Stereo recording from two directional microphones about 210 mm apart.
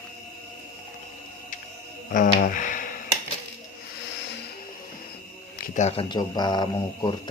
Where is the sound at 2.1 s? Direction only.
40° left (ahead or behind).